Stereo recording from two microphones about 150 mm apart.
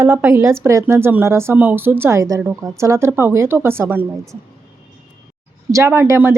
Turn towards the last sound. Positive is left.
turn(degrees=-15)  # may be behind; listen again after turning